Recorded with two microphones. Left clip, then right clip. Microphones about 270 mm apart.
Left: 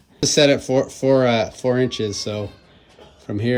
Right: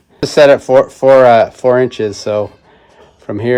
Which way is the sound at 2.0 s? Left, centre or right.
Right.